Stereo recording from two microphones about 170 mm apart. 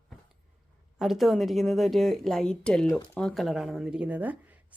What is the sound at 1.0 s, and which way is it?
Speech, centre (ahead or behind).